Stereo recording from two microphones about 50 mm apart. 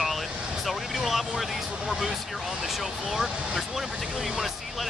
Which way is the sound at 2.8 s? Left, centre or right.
Centre.